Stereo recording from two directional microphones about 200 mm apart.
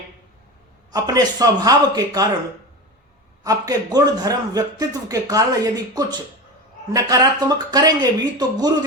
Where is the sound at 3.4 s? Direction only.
20° right (ahead or behind).